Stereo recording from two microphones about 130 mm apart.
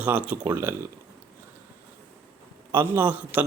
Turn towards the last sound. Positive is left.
turn(degrees=-15)  # may be behind; listen again after turning